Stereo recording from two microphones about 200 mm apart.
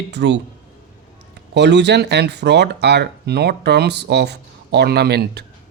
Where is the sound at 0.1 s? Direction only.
60° right (ahead or behind).